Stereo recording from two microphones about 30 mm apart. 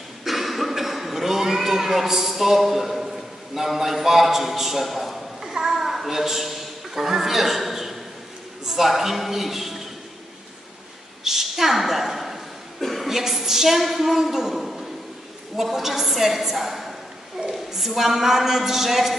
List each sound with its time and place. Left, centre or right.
0.2 s cough: centre
5.4 s a child's voice: centre
11.2 s a woman's voice: centre
12.8 s a sound: centre
13.1 s a woman's voice: centre